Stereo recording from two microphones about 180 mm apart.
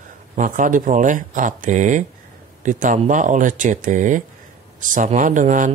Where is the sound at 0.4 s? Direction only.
45° right (ahead or behind).